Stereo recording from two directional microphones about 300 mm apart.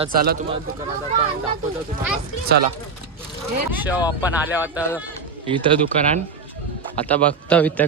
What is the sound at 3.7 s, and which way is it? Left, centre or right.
Speech, centre.